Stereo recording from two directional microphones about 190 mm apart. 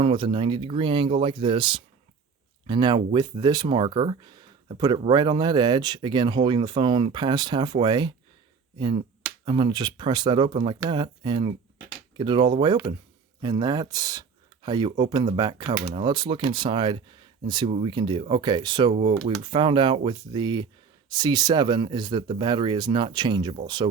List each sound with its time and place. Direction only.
0.0 s speech: 25° right (ahead or behind)
9.5 s speech: 25° right (ahead or behind)